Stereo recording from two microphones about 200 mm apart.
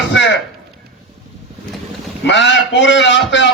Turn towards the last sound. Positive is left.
turn(degrees=65)  # may be behind; listen again after turning